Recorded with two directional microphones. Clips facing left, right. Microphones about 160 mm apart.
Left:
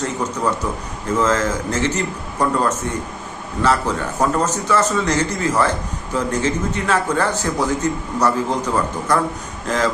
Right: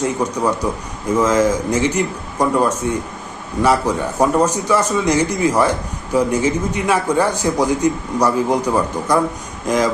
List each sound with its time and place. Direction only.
0.0 s a man's voice: 15° right (ahead or behind)